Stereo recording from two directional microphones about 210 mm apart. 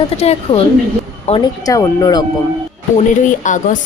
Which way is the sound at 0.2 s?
30° left (ahead or behind).